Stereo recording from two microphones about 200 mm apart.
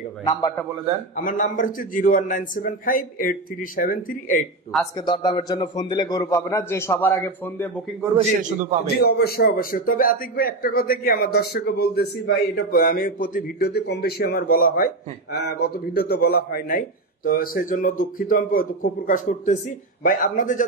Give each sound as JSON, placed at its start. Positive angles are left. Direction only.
{"t": 0.2, "sound": "a man's voice", "side_deg": 15}
{"t": 1.1, "sound": "a man's voice", "side_deg": 40}
{"t": 5.0, "sound": "a man's voice", "side_deg": 20}
{"t": 8.9, "sound": "a man's voice", "side_deg": 55}